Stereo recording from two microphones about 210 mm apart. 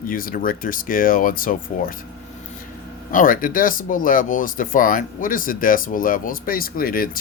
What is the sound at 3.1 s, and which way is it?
Speech, 40° left (ahead or behind).